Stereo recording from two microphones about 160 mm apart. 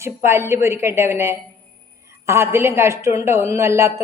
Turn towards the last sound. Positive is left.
turn(degrees=-15)  # may be behind; listen again after turning